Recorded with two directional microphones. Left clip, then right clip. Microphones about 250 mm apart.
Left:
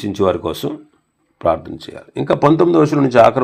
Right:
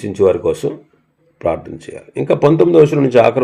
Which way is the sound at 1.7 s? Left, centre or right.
Centre.